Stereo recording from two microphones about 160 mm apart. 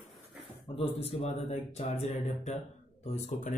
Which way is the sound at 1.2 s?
45° left (ahead or behind).